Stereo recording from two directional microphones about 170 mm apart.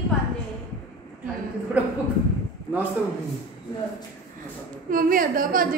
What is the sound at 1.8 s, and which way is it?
Speech, 10° right (ahead or behind).